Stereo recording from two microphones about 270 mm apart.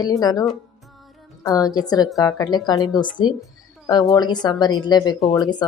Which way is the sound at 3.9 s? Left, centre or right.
Centre.